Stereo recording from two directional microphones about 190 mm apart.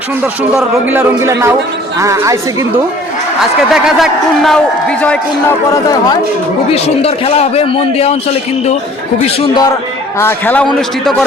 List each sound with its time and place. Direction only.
0.5 s a man's voice: 10° right (ahead or behind)
3.7 s a man's voice: centre (ahead or behind)
5.7 s a man's voice: 20° left (ahead or behind)
6.7 s a man's voice: 30° left (ahead or behind)
9.2 s a man's voice: 20° left (ahead or behind)
10.2 s a man's voice: 10° left (ahead or behind)